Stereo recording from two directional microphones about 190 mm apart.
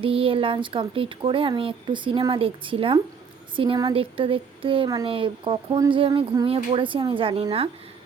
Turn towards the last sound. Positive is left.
turn(degrees=-30)  # may be behind; listen again after turning